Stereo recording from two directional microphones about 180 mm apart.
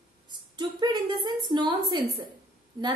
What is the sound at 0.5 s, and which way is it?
A woman's voice, 25° right (ahead or behind).